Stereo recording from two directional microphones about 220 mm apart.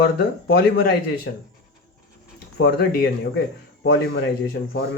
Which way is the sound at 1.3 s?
50° left (ahead or behind).